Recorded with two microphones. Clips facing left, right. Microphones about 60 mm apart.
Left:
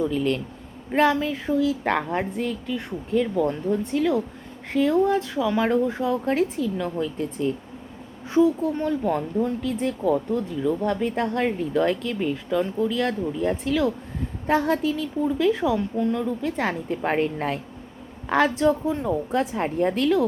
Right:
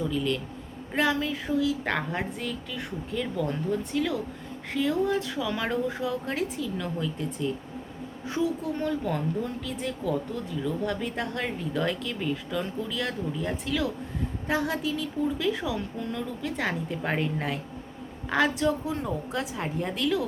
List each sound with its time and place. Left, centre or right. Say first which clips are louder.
0.0 s a woman's voice: left 5 dB; left
6.7 s a woman's voice: left 5 dB; left
7.2 s a woman's voice: left 5 dB; left; by 12.9 s centre
12.9 s a woman's voice: left 6 dB; left
18.3 s a woman's voice: left 5 dB; left